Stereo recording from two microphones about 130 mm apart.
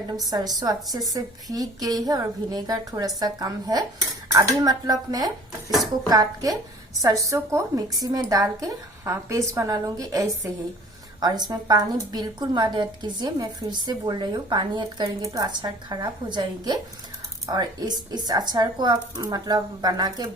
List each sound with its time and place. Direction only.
0.3 s a woman's voice: 30° right (ahead or behind)